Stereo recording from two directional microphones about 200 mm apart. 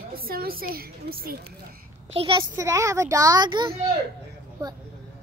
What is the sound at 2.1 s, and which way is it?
Speech, 25° right (ahead or behind).